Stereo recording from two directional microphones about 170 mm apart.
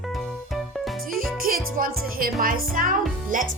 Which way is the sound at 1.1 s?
Centre (ahead or behind).